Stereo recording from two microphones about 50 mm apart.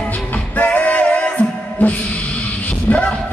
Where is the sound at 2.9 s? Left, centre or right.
Left.